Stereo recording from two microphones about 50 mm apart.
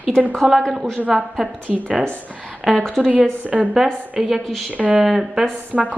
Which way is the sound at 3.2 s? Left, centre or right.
Right.